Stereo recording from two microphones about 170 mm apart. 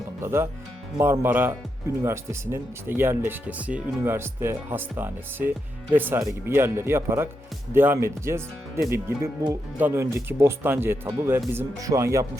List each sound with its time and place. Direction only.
0.2 s speech: 15° right (ahead or behind)